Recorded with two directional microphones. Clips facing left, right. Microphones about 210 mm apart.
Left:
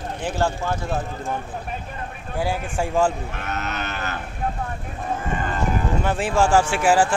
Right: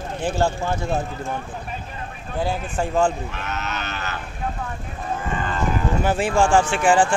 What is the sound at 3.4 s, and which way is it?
Cattle, 50° left (ahead or behind).